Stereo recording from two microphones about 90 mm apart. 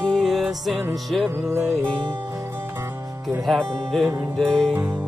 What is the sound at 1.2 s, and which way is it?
Music, 25° right (ahead or behind).